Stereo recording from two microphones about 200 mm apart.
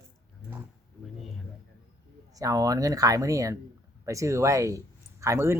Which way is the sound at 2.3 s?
15° right (ahead or behind).